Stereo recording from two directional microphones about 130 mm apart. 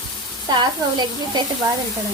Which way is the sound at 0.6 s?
35° right (ahead or behind).